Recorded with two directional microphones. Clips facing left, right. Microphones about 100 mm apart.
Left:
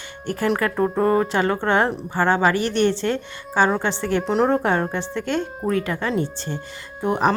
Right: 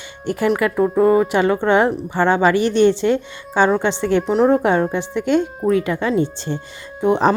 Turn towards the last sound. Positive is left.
turn(degrees=-25)  # may be behind; listen again after turning